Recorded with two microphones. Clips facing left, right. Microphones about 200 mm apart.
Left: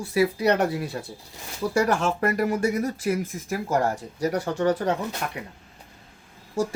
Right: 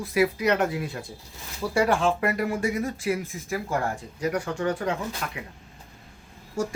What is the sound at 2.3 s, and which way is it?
Speech, 40° left (ahead or behind).